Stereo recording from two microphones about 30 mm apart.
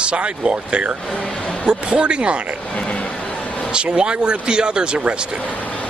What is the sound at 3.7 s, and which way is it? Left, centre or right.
Speech, right.